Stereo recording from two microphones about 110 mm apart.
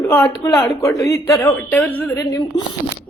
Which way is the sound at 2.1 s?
35° left (ahead or behind).